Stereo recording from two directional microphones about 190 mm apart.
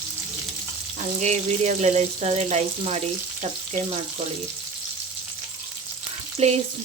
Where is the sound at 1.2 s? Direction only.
35° right (ahead or behind).